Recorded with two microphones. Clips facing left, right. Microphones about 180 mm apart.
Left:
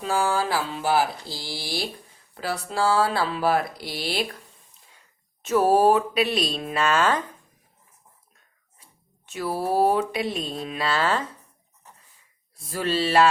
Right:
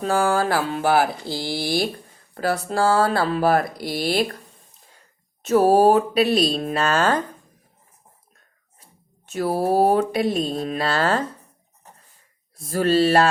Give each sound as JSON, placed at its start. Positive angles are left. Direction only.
{"t": 0.0, "sound": "speech", "side_deg": -50}
{"t": 5.4, "sound": "speech", "side_deg": -35}
{"t": 8.8, "sound": "speech", "side_deg": -40}
{"t": 12.5, "sound": "speech", "side_deg": -45}